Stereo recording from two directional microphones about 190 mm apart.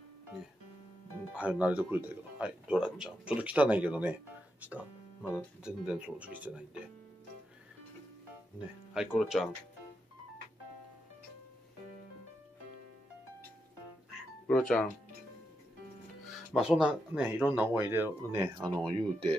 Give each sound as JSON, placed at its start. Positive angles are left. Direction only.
{"t": 1.3, "sound": "speech", "side_deg": -5}
{"t": 8.9, "sound": "speech", "side_deg": -5}
{"t": 14.5, "sound": "speech", "side_deg": 5}
{"t": 16.5, "sound": "speech", "side_deg": 0}
{"t": 18.9, "sound": "speech", "side_deg": -25}